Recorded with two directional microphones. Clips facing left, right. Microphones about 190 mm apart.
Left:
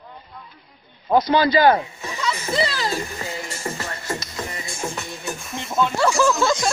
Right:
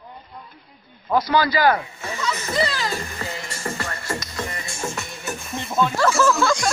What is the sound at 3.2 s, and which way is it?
Music, 15° left (ahead or behind).